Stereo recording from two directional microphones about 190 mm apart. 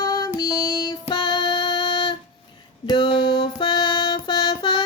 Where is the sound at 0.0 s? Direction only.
20° left (ahead or behind).